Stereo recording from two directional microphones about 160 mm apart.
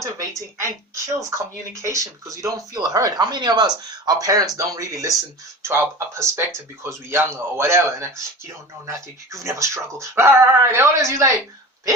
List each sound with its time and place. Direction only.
0.0 s speech: 20° right (ahead or behind)